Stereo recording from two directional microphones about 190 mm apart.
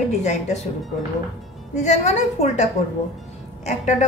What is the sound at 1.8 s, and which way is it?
Speech, 35° left (ahead or behind).